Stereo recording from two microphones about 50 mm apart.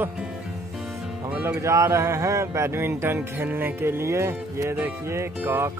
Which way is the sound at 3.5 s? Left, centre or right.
Right.